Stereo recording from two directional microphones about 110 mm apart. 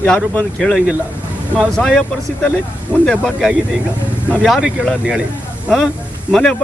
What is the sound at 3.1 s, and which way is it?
A man's voice, 5° left (ahead or behind).